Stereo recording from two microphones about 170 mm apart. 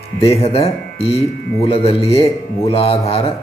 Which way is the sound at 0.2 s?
35° left (ahead or behind).